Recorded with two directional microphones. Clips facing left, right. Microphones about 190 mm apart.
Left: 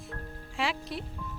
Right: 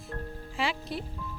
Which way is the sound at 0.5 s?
Centre (ahead or behind).